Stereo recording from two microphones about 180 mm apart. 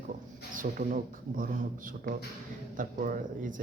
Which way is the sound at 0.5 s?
45° right (ahead or behind).